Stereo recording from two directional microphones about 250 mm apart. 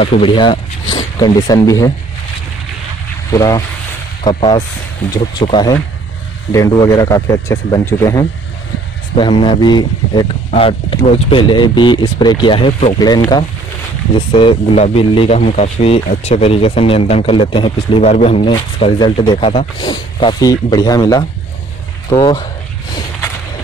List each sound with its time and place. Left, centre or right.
0.0 s speech: left
3.3 s speech: centre